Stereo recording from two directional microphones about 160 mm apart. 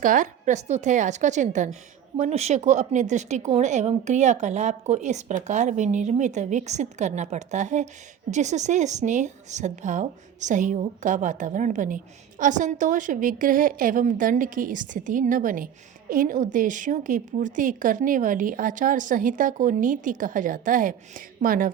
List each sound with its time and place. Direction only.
0.0 s a woman's voice: 55° right (ahead or behind)